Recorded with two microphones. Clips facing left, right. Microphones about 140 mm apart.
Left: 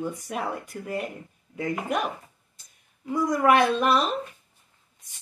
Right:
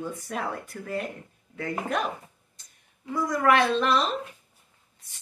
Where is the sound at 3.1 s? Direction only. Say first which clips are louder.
Left 2 dB; 15° left (ahead or behind).